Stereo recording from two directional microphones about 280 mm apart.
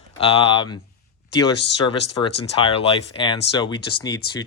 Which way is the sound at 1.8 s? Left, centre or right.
Centre.